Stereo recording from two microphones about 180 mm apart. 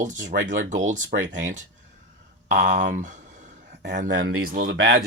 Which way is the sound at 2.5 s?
45° right (ahead or behind).